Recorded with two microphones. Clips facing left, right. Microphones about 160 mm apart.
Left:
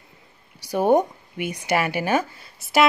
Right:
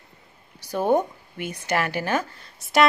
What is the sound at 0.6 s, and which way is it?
Speech, 15° left (ahead or behind).